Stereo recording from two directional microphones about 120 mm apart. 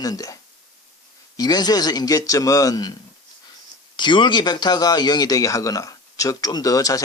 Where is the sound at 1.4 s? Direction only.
35° left (ahead or behind).